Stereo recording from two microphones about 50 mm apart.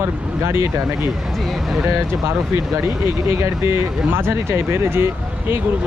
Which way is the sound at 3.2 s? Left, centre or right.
Right.